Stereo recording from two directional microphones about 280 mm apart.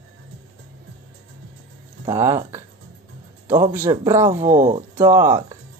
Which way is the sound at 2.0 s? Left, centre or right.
Centre.